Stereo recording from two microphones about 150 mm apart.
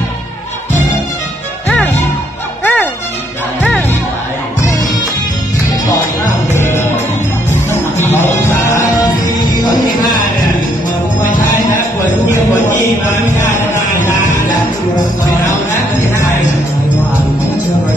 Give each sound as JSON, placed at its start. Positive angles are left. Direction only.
{"t": 2.6, "sound": "music", "side_deg": 10}
{"t": 6.5, "sound": "music", "side_deg": 15}
{"t": 8.0, "sound": "music", "side_deg": 15}
{"t": 13.0, "sound": "music", "side_deg": 15}